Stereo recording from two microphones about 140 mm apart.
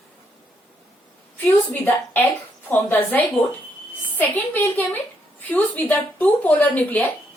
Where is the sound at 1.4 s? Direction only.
10° left (ahead or behind).